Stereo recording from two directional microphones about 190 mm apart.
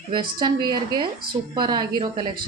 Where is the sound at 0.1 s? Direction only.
25° right (ahead or behind).